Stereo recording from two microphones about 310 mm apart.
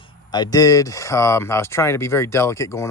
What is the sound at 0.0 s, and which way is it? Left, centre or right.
Speech, centre.